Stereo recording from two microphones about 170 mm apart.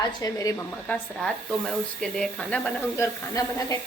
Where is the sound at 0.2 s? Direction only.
20° left (ahead or behind).